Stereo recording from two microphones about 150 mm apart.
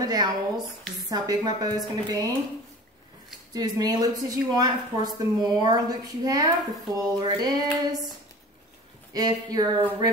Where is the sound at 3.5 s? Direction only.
25° right (ahead or behind).